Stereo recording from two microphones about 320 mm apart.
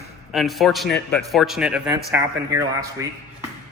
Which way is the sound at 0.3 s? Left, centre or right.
Centre.